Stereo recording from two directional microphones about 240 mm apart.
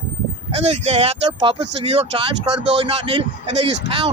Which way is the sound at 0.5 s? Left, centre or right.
Right.